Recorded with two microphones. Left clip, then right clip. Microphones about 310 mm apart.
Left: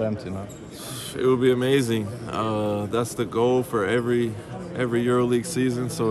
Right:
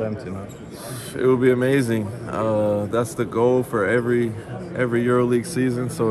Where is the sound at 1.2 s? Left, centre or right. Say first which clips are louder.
Right 3 dB; centre.